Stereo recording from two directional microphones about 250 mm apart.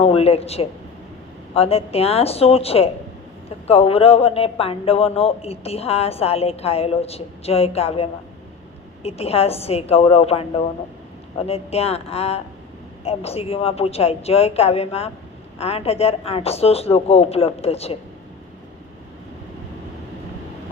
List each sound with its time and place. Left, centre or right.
0.0 s a man's voice: left
9.0 s a man's voice: left